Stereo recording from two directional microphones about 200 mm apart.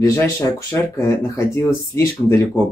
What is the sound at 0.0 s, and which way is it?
Speech, 15° left (ahead or behind).